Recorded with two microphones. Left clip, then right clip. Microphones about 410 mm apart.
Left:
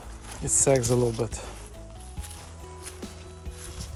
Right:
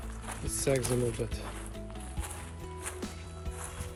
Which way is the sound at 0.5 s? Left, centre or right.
Centre.